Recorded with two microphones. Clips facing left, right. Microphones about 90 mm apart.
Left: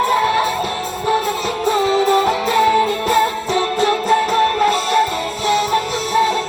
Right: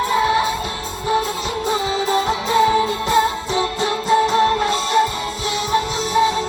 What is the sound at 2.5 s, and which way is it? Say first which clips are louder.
Music: even; 25° right (ahead or behind).